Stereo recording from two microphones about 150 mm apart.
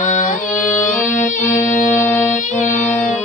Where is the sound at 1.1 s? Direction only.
50° left (ahead or behind).